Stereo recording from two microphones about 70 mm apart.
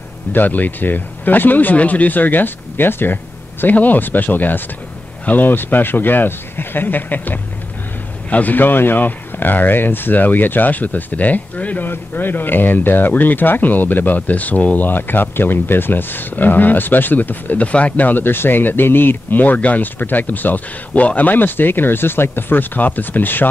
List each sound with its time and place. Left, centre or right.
0.3 s speech: left